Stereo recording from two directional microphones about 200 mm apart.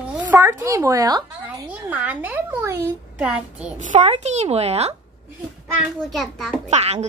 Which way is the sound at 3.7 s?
40° right (ahead or behind).